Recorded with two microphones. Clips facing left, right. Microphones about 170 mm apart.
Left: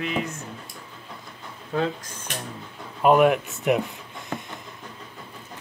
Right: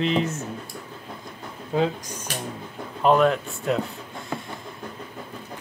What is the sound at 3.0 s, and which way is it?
Speech, 10° left (ahead or behind).